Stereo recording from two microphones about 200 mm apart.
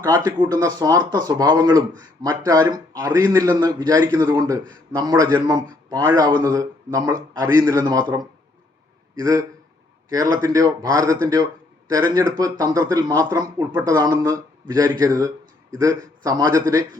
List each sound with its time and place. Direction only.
0.3 s a man's voice: 20° right (ahead or behind)